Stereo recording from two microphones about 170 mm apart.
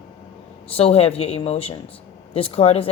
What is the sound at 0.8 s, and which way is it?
Speech, 35° left (ahead or behind).